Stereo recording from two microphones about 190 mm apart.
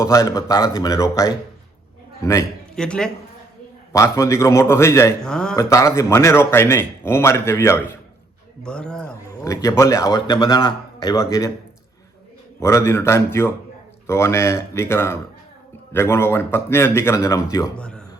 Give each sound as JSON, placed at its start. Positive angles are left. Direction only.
{"t": 0.0, "sound": "speech", "side_deg": 15}
{"t": 2.7, "sound": "a man's voice", "side_deg": 5}
{"t": 3.9, "sound": "speech", "side_deg": 15}
{"t": 5.2, "sound": "a man's voice", "side_deg": 5}
{"t": 5.5, "sound": "a man's voice", "side_deg": 15}
{"t": 9.4, "sound": "speech", "side_deg": 15}
{"t": 12.5, "sound": "speech", "side_deg": 15}
{"t": 17.7, "sound": "speech", "side_deg": 5}